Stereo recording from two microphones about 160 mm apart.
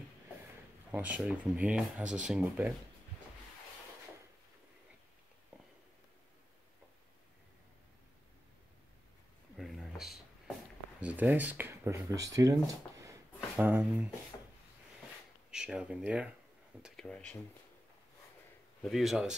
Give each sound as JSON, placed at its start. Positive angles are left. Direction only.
{"t": 0.9, "sound": "speech", "side_deg": -10}
{"t": 9.6, "sound": "a sound", "side_deg": 0}
{"t": 11.0, "sound": "speech", "side_deg": -10}
{"t": 15.5, "sound": "speech", "side_deg": -5}
{"t": 16.8, "sound": "speech", "side_deg": 0}
{"t": 18.8, "sound": "speech", "side_deg": 0}